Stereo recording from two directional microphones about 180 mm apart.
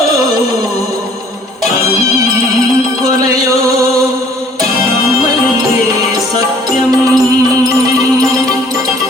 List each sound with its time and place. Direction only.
6.9 s music: 20° right (ahead or behind)
8.2 s music: 20° right (ahead or behind)